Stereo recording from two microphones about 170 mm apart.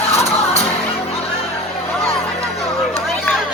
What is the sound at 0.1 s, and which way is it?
Music, 40° left (ahead or behind).